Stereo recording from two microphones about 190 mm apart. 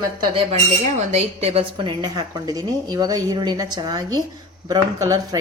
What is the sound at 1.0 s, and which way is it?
A woman's voice, 35° right (ahead or behind).